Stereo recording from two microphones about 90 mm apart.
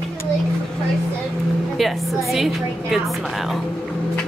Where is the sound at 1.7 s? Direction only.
Centre (ahead or behind).